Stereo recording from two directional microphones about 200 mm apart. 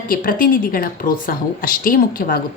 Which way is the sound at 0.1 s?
45° left (ahead or behind).